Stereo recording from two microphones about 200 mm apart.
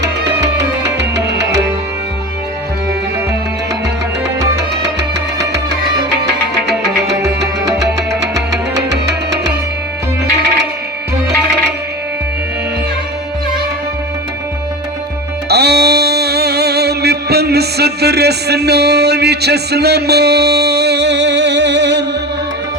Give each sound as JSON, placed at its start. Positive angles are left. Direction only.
{"t": 0.0, "sound": "music", "side_deg": -60}
{"t": 4.4, "sound": "music", "side_deg": -60}
{"t": 6.8, "sound": "music", "side_deg": -55}
{"t": 15.4, "sound": "music", "side_deg": -55}